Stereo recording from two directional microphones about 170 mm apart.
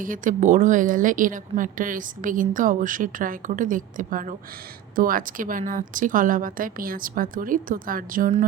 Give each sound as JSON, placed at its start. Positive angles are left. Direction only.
{"t": 0.0, "sound": "a woman's voice", "side_deg": -50}